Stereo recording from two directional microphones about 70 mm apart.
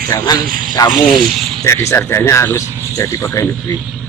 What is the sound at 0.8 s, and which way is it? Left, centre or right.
Speech, left.